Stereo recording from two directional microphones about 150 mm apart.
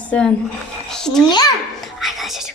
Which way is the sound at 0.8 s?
5° left (ahead or behind).